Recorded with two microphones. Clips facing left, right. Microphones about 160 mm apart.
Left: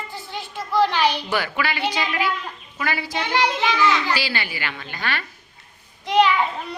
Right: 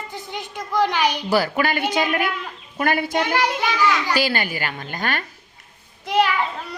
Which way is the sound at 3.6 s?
10° right (ahead or behind).